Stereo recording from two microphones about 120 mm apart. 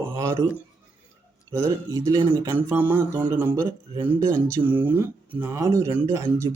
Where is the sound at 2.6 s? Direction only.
20° right (ahead or behind).